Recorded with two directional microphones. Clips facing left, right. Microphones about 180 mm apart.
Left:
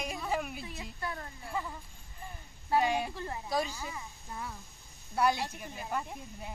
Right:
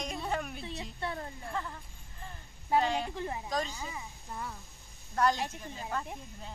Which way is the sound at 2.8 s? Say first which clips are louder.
Left 3 dB; 15° left (ahead or behind).